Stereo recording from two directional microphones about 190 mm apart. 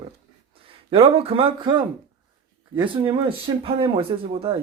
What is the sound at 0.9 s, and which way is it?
Speech, 30° right (ahead or behind).